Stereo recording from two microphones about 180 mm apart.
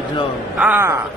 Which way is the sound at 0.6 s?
10° right (ahead or behind).